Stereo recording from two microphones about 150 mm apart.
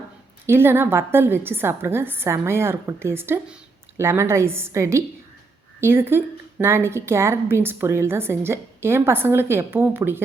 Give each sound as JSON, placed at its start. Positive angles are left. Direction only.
{"t": 0.4, "sound": "a woman's voice", "side_deg": -15}